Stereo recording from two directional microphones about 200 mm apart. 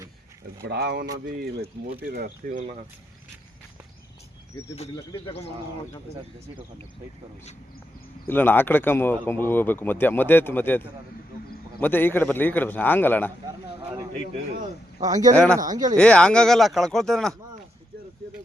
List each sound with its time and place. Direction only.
0.6 s speech: 55° right (ahead or behind)
2.0 s speech: 50° right (ahead or behind)
4.7 s speech: 30° left (ahead or behind)
8.3 s speech: 10° left (ahead or behind)
15.0 s speech: 20° right (ahead or behind)
16.0 s speech: 5° left (ahead or behind)